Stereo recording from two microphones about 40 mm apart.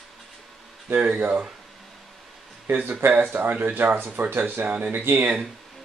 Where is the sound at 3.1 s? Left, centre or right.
Right.